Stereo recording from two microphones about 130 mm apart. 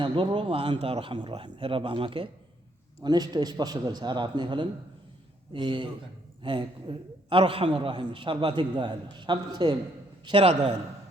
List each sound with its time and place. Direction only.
0.0 s a man's voice: 40° right (ahead or behind)